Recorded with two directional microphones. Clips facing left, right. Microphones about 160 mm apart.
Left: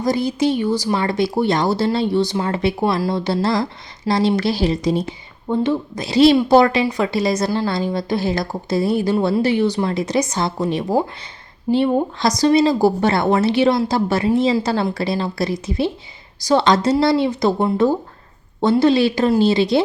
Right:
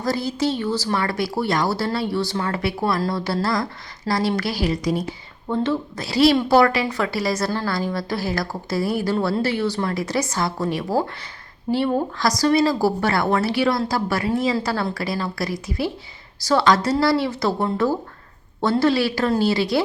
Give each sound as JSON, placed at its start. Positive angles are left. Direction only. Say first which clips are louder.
{"t": 0.0, "sound": "speech", "louder": "left 4 dB", "side_deg": 15}